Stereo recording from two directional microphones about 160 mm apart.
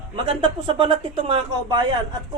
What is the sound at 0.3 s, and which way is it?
Speech, 35° right (ahead or behind).